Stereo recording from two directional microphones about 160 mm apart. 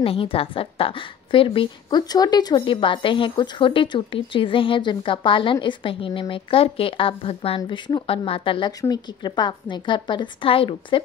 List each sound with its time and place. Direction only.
0.0 s a woman's voice: 35° left (ahead or behind)